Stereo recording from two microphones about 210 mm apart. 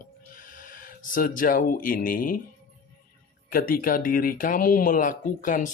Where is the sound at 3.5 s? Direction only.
40° left (ahead or behind).